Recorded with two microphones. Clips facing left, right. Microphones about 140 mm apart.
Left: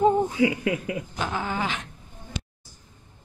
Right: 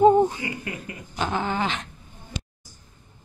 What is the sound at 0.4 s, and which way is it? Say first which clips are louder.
Speech: left 10 dB; 90° left.